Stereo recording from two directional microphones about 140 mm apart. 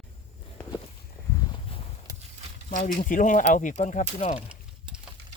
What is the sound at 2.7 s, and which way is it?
Speech, 60° left (ahead or behind).